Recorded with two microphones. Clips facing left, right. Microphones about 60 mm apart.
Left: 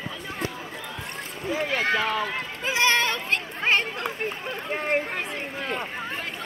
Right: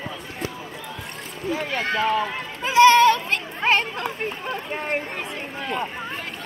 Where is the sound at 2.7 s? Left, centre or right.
Left.